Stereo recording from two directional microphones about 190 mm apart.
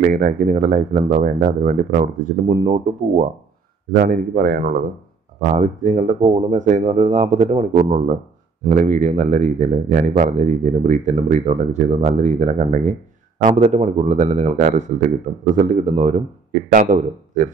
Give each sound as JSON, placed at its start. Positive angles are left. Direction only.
{"t": 0.0, "sound": "speech", "side_deg": -45}
{"t": 8.6, "sound": "speech", "side_deg": -40}